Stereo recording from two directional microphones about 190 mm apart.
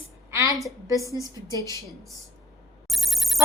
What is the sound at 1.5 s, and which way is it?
Speech, 15° left (ahead or behind).